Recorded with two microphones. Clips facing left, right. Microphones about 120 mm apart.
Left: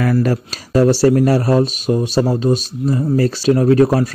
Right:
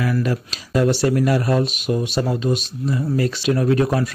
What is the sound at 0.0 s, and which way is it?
Speech, 45° left (ahead or behind).